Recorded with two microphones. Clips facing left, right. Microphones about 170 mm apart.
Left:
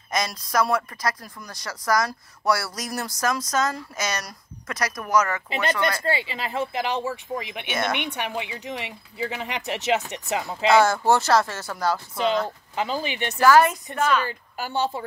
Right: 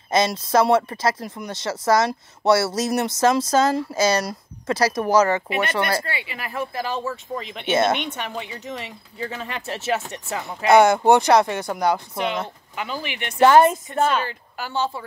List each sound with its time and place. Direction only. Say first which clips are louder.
0.1 s speech: right 7 dB; 25° right (ahead or behind)
6.0 s speech: left 5 dB; 30° left (ahead or behind); by 7.6 s 10° left (ahead or behind)
7.6 s speech: right 10 dB; 25° right (ahead or behind)
8.1 s speech: left 1 dB; 10° left (ahead or behind)
10.7 s speech: right 4 dB; 20° right (ahead or behind)
12.7 s speech: left 3 dB; 25° left (ahead or behind)
13.4 s speech: right 3 dB; 25° right (ahead or behind)
13.9 s speech: left 2 dB; 40° right (ahead or behind)